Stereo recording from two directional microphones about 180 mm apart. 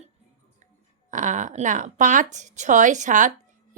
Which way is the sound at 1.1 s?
45° right (ahead or behind).